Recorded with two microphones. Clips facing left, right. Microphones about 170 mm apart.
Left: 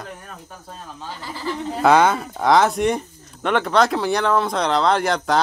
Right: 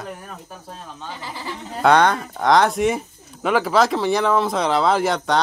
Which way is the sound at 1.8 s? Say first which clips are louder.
Even; 5° left (ahead or behind).